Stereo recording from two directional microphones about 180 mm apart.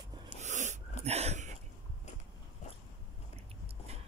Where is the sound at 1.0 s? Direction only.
35° right (ahead or behind).